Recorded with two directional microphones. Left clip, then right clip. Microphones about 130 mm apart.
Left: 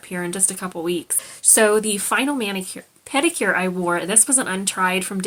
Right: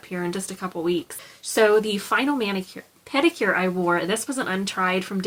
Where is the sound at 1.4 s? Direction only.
45° left (ahead or behind).